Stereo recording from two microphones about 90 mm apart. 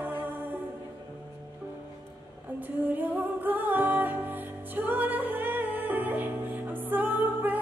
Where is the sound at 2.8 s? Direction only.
20° right (ahead or behind).